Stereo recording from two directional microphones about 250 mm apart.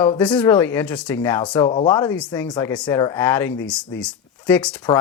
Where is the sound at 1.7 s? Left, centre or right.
Left.